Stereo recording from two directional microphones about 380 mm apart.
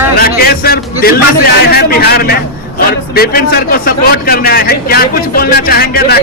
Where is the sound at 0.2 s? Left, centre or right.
Left.